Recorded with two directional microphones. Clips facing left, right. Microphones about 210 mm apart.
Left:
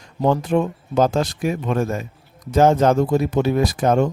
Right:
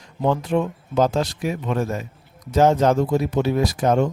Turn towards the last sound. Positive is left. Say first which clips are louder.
# left 1 dB
turn(degrees=50)  # may be behind; listen again after turning